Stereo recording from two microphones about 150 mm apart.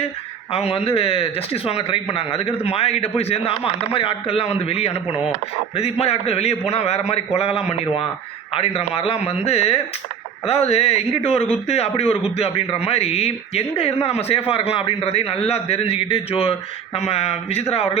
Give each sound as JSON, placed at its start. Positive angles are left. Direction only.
{"t": 0.5, "sound": "a man's voice", "side_deg": 40}